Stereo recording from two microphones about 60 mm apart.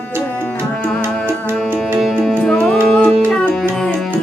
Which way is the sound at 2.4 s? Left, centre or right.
Centre.